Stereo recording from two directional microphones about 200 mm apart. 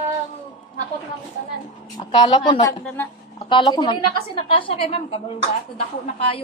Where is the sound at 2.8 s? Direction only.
10° left (ahead or behind).